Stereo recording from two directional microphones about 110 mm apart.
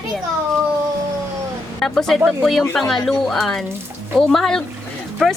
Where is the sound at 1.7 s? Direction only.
5° left (ahead or behind).